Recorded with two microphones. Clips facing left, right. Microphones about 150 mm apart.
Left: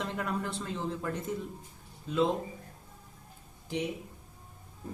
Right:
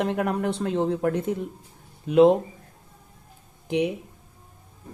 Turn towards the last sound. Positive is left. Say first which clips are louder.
# right 10 dB
turn(degrees=-60)  # may be behind; listen again after turning